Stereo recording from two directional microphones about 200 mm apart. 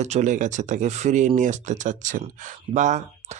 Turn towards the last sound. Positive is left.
turn(degrees=-35)  # may be behind; listen again after turning